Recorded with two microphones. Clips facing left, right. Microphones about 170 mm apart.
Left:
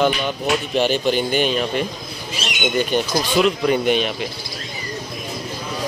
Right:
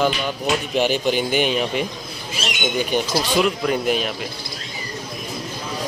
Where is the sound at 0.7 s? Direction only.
15° right (ahead or behind).